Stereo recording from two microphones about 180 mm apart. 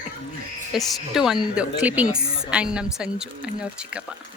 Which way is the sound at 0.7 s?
Centre (ahead or behind).